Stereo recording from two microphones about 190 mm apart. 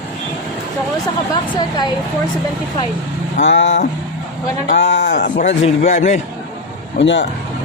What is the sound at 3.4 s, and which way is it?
Speech, 70° left (ahead or behind).